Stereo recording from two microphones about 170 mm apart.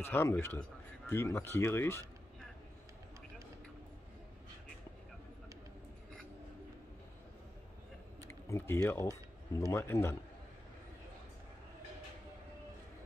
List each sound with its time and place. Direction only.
0.0 s speech: 15° left (ahead or behind)
8.3 s typing: 15° left (ahead or behind)
8.8 s speech: 15° left (ahead or behind)